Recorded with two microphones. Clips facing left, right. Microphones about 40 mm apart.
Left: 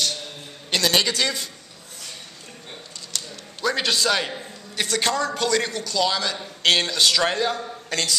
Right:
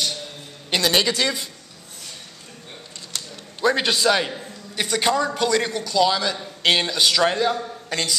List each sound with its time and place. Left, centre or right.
0.7 s a man's voice: centre
3.1 s a sound: right
3.6 s a man's voice: centre